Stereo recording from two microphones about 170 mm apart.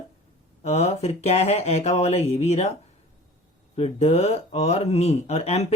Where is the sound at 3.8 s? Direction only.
40° left (ahead or behind).